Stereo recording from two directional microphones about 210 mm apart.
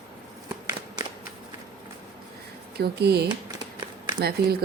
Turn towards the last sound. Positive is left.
turn(degrees=-50)  # may be behind; listen again after turning